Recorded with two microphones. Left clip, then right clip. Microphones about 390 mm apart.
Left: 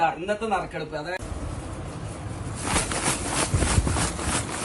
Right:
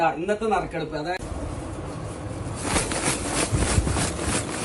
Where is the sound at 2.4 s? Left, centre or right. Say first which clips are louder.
Right 1 dB; centre.